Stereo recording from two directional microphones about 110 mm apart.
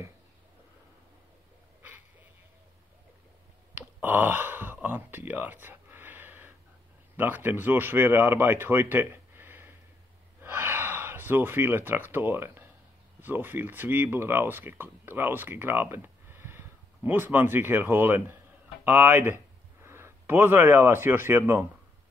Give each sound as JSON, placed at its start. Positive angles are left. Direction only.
{"t": 3.7, "sound": "a sound", "side_deg": -20}
{"t": 7.2, "sound": "speech", "side_deg": -15}
{"t": 10.4, "sound": "gasp", "side_deg": -20}
{"t": 13.2, "sound": "speech", "side_deg": -20}